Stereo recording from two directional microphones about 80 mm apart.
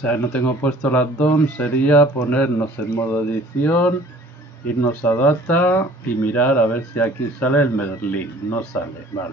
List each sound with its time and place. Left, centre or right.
0.0 s speech: centre